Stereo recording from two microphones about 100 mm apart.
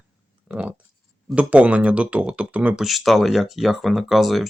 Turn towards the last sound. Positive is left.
turn(degrees=0)  # may be behind; listen again after turning